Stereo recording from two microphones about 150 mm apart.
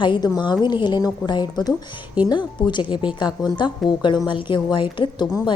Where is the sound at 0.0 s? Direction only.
30° left (ahead or behind).